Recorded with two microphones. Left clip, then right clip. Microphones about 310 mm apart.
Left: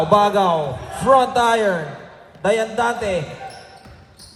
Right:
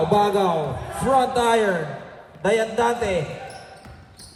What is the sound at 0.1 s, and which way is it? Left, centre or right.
A man's voice, centre.